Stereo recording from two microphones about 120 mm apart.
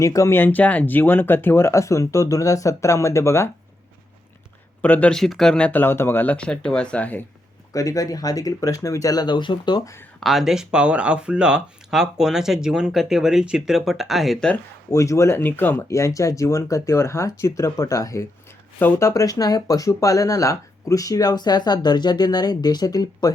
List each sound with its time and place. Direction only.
0.0 s speech: 25° left (ahead or behind)
4.8 s speech: 10° left (ahead or behind)
7.7 s speech: 30° left (ahead or behind)
10.2 s speech: centre (ahead or behind)
14.5 s speech: 25° left (ahead or behind)